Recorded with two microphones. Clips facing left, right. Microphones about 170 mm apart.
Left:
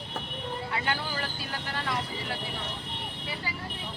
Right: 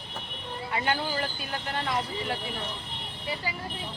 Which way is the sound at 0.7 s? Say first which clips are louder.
Right 6 dB; 25° right (ahead or behind).